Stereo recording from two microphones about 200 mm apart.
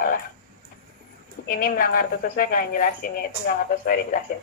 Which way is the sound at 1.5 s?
45° left (ahead or behind).